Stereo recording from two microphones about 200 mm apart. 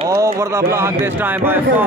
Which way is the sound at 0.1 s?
15° right (ahead or behind).